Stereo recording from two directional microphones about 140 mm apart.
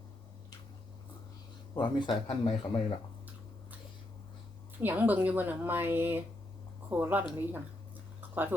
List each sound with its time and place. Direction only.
1.7 s speech: 35° left (ahead or behind)
4.8 s speech: 15° right (ahead or behind)